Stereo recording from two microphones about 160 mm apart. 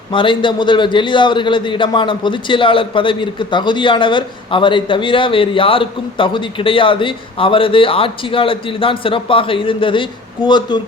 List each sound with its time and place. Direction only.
0.1 s a man's voice: 30° left (ahead or behind)